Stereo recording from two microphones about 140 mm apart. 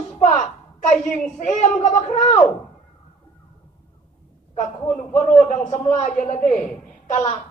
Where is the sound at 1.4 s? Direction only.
60° left (ahead or behind).